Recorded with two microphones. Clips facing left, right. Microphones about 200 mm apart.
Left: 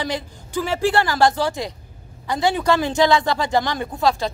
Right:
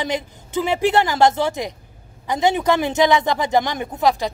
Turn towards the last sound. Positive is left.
turn(degrees=-15)  # may be behind; listen again after turning